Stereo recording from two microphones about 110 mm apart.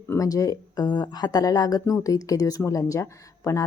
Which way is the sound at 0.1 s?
30° left (ahead or behind).